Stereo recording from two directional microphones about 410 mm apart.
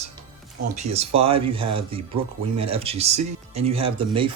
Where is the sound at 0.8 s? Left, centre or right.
Centre.